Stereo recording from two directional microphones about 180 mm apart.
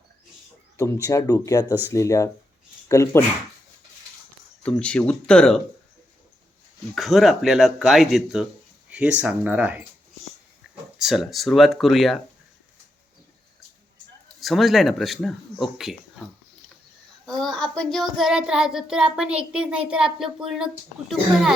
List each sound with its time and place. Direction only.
1.0 s speech: 20° left (ahead or behind)
4.6 s child singing: 5° left (ahead or behind)
6.9 s child singing: centre (ahead or behind)
8.9 s speech: 5° right (ahead or behind)
10.9 s child singing: centre (ahead or behind)
14.4 s child singing: centre (ahead or behind)
17.2 s child singing: centre (ahead or behind)